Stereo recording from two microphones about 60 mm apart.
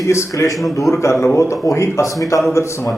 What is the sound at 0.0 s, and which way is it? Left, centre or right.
A man's voice, left.